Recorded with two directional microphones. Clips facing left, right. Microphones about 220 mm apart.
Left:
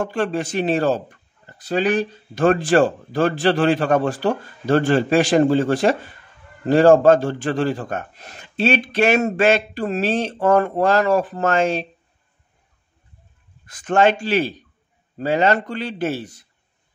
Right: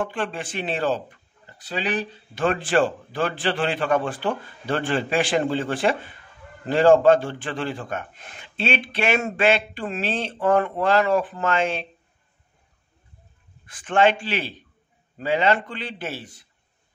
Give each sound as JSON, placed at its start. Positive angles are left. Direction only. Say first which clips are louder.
{"t": 0.0, "sound": "speech", "louder": "left 6 dB", "side_deg": 40}
{"t": 13.7, "sound": "speech", "louder": "left 3 dB", "side_deg": 40}